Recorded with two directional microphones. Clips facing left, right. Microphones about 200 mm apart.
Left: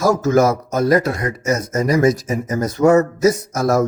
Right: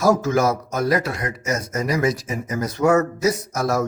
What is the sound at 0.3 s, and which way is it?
A man's voice, 45° left (ahead or behind).